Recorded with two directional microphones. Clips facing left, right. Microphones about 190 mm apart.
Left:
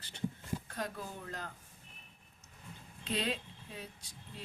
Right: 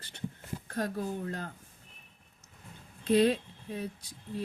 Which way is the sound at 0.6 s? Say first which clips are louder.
Right 8 dB; 45° right (ahead or behind).